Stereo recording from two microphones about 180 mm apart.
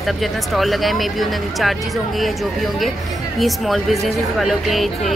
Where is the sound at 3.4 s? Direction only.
Centre (ahead or behind).